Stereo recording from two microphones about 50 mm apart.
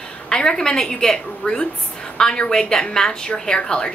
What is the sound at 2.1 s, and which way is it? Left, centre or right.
A woman's voice, centre.